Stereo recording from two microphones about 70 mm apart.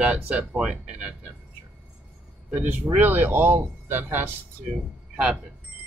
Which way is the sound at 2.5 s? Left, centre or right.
Right.